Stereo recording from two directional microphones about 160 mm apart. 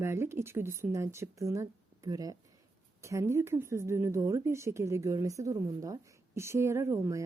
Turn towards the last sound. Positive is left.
turn(degrees=-20)  # may be behind; listen again after turning